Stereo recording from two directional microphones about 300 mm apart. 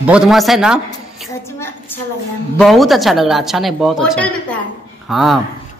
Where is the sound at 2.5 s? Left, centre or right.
Centre.